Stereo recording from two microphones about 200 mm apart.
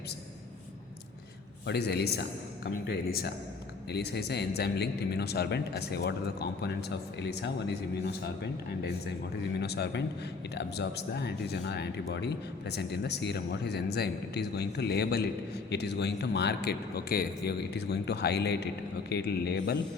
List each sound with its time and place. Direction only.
1.6 s speech: 55° left (ahead or behind)